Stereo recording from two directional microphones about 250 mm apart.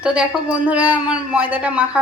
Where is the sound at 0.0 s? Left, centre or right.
Centre.